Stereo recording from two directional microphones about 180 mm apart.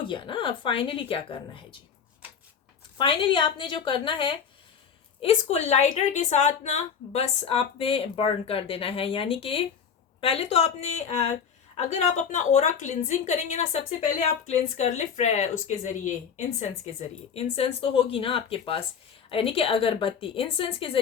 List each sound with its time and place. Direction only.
0.1 s speech: 25° left (ahead or behind)
3.0 s a woman's voice: 30° left (ahead or behind)